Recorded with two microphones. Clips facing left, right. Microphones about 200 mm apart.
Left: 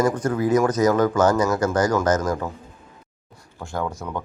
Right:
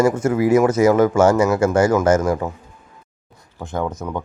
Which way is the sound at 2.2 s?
15° right (ahead or behind).